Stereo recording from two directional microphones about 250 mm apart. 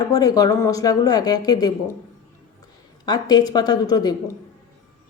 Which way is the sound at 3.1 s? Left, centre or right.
Centre.